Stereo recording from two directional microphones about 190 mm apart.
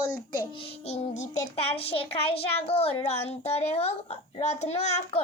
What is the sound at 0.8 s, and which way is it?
A child's voice, 35° left (ahead or behind).